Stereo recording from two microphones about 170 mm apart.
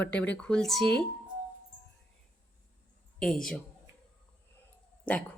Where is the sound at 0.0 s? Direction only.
10° left (ahead or behind).